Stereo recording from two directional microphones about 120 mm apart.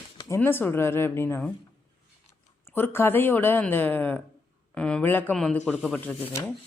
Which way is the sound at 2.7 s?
20° left (ahead or behind).